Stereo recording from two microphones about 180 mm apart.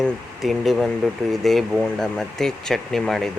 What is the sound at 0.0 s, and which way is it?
Speech, centre (ahead or behind).